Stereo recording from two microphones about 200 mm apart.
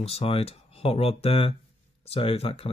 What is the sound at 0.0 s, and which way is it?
Speech, 30° left (ahead or behind).